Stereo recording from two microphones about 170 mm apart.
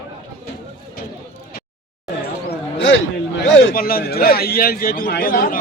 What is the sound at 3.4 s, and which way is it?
A man's voice, 70° left (ahead or behind).